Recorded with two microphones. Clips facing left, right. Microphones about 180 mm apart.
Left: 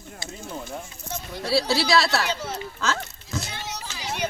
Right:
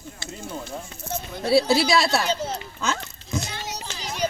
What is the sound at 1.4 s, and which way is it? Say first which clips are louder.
Speech: right 4 dB; 20° right (ahead or behind).